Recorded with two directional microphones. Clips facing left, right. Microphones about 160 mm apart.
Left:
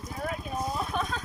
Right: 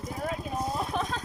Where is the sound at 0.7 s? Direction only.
25° right (ahead or behind).